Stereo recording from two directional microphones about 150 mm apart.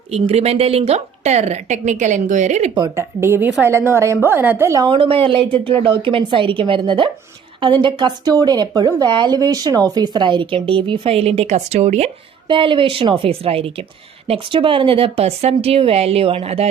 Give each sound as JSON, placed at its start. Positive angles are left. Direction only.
{"t": 0.1, "sound": "a woman's voice", "side_deg": -45}
{"t": 2.9, "sound": "a woman's voice", "side_deg": -15}
{"t": 4.9, "sound": "speech", "side_deg": -35}
{"t": 12.5, "sound": "speech", "side_deg": -35}